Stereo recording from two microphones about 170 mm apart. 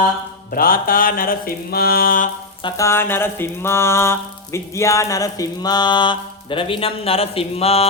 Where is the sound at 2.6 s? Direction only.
25° left (ahead or behind).